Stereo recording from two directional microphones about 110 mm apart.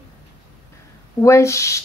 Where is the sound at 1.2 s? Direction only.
25° left (ahead or behind).